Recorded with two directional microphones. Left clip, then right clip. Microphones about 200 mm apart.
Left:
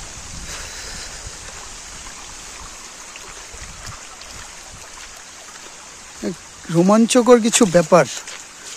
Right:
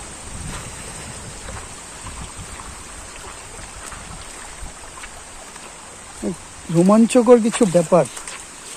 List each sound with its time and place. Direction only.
6.7 s speech: 30° left (ahead or behind)